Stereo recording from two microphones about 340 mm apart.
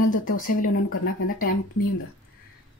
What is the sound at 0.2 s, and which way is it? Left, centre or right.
Speech, left.